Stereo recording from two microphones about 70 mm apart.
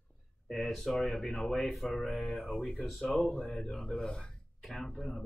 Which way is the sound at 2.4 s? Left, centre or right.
Left.